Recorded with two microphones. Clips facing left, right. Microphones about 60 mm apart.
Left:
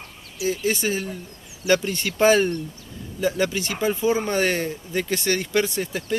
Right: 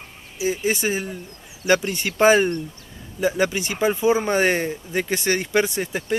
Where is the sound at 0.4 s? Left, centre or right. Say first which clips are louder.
Right 1 dB; right.